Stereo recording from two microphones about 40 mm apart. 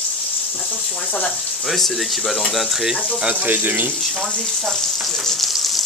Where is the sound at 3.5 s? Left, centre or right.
Right.